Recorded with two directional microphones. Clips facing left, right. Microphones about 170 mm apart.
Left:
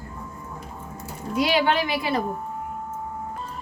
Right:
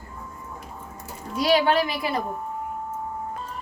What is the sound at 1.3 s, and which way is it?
Speech, 20° left (ahead or behind).